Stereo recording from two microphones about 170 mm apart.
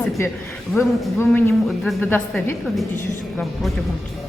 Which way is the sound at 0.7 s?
15° left (ahead or behind).